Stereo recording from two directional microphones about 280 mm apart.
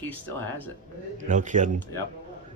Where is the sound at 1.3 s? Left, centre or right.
Right.